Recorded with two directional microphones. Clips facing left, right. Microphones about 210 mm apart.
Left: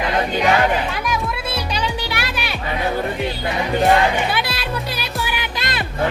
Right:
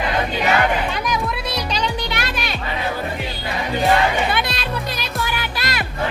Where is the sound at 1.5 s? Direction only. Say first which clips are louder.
Right 1 dB; 5° left (ahead or behind).